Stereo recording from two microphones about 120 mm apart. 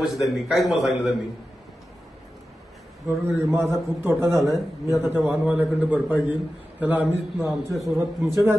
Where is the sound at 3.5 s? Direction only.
20° right (ahead or behind).